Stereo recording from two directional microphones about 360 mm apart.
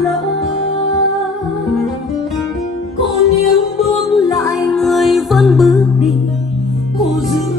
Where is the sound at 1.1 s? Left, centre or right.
Centre.